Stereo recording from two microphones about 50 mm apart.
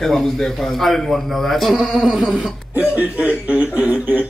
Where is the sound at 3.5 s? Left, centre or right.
Right.